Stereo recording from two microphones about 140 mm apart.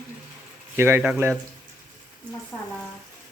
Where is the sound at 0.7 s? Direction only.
15° right (ahead or behind).